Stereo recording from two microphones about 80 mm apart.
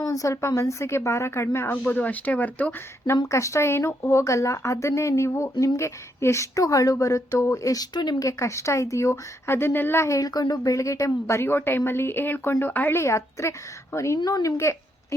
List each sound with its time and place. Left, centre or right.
0.0 s speech: left
1.7 s speech: left
3.3 s speech: left
8.2 s speech: left